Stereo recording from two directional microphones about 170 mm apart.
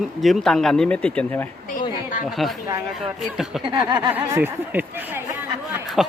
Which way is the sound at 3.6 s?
25° right (ahead or behind).